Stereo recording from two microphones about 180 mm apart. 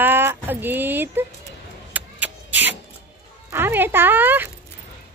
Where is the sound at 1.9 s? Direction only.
10° right (ahead or behind).